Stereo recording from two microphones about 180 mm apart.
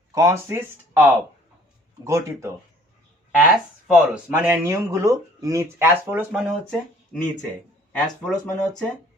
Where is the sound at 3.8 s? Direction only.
Centre (ahead or behind).